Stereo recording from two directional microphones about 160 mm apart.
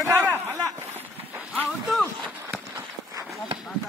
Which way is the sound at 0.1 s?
10° right (ahead or behind).